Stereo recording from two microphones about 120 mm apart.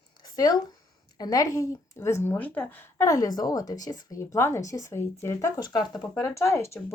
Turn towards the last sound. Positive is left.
turn(degrees=25)  # may be behind; listen again after turning